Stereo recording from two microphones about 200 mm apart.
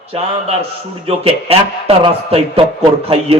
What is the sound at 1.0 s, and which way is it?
A man's voice, 30° right (ahead or behind).